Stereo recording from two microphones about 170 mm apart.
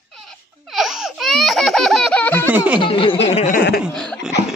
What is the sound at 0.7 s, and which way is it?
Baby laughter, centre (ahead or behind).